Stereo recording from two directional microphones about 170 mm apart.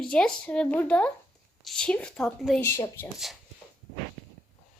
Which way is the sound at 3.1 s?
Centre (ahead or behind).